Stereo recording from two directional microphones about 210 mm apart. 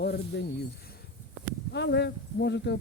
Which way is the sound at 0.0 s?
50° left (ahead or behind).